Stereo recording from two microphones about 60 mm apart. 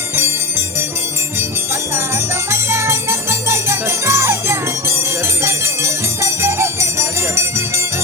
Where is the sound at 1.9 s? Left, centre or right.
Right.